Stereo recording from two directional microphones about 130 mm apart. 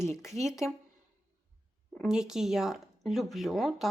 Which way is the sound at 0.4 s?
55° right (ahead or behind).